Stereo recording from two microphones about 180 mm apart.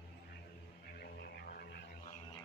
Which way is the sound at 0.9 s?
60° left (ahead or behind).